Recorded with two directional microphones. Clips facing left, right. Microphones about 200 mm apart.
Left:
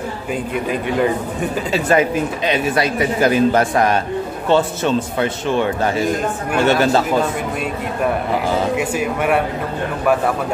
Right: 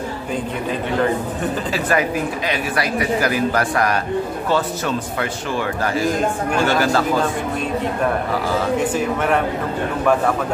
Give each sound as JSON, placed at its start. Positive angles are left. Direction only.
{"t": 1.7, "sound": "speech", "side_deg": 25}
{"t": 8.7, "sound": "a man's voice", "side_deg": 10}